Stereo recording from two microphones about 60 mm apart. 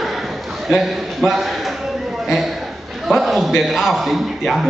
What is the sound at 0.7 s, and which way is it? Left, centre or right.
A man's voice, centre.